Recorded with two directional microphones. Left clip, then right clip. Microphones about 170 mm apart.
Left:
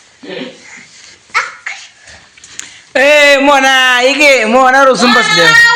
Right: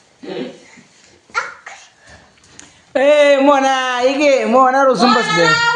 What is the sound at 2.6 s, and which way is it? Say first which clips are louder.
Speech: left 5 dB; 10° left (ahead or behind).